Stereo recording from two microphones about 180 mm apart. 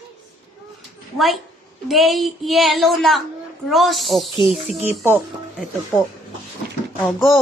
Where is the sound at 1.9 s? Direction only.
Centre (ahead or behind).